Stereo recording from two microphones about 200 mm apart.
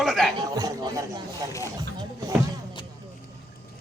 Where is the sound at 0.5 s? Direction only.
20° right (ahead or behind).